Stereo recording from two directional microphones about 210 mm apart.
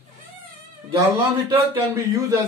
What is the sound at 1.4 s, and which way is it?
Speech, 15° right (ahead or behind).